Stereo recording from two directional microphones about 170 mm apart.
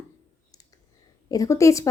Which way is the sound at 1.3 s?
20° left (ahead or behind).